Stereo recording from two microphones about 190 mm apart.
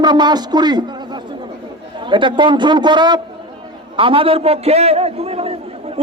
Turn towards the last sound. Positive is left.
turn(degrees=-30)  # may be behind; listen again after turning